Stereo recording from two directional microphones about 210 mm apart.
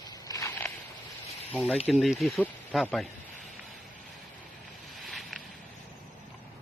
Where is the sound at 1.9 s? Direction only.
Centre (ahead or behind).